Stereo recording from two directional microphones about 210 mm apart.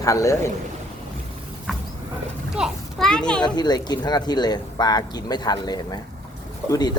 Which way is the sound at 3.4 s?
20° left (ahead or behind).